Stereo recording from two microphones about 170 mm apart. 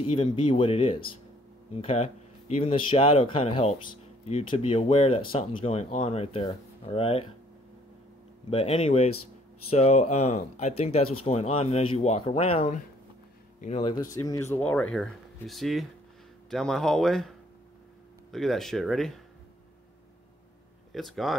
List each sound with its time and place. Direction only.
0.1 s speech: 30° left (ahead or behind)
8.5 s speech: 40° left (ahead or behind)
13.8 s speech: 20° left (ahead or behind); by 17.3 s centre (ahead or behind)
18.3 s speech: centre (ahead or behind)
20.9 s speech: centre (ahead or behind)